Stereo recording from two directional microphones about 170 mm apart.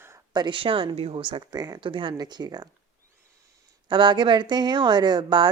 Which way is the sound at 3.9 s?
25° right (ahead or behind).